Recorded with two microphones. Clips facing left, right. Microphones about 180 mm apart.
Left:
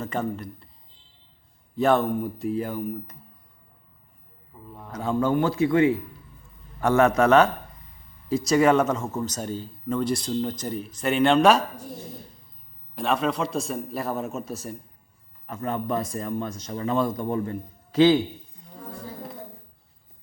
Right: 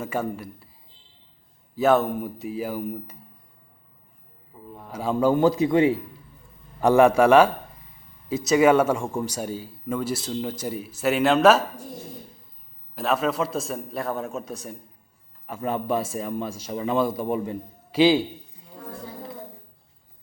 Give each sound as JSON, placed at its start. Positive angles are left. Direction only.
{"t": 0.0, "sound": "speech", "side_deg": -10}
{"t": 1.7, "sound": "a man's voice", "side_deg": -5}
{"t": 4.5, "sound": "a man's voice", "side_deg": -10}
{"t": 13.0, "sound": "a man's voice", "side_deg": -5}